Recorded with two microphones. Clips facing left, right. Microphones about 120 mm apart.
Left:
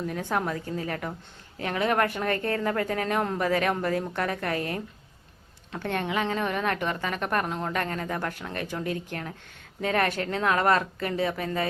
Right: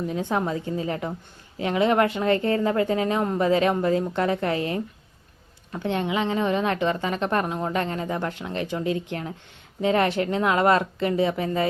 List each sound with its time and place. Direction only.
0.1 s speech: 20° right (ahead or behind)
5.8 s speech: 20° right (ahead or behind)
7.4 s speech: 15° right (ahead or behind)